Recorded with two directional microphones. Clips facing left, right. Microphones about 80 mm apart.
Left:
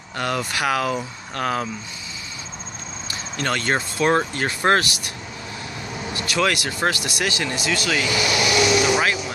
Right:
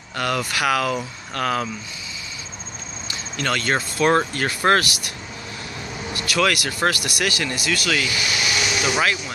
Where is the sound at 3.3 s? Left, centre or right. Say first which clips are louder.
Even; left.